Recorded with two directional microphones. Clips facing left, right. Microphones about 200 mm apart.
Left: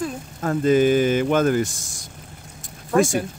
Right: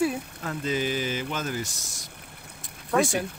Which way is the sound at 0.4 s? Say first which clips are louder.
Left 13 dB; 50° left (ahead or behind).